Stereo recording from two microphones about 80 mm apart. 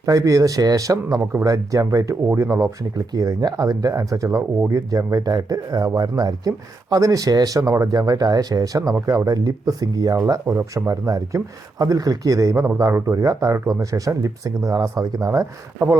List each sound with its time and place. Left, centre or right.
0.0 s speech: right
1.2 s speech: right
1.5 s speech: right
2.2 s speech: right
2.9 s speech: right
10.4 s speech: right
10.8 s speech: right